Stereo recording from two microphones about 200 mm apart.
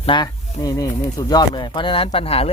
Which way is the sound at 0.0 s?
25° left (ahead or behind).